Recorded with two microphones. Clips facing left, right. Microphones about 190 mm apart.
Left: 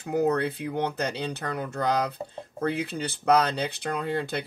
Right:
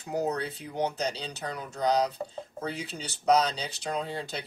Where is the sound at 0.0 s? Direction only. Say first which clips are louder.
Left 6 dB; 55° left (ahead or behind).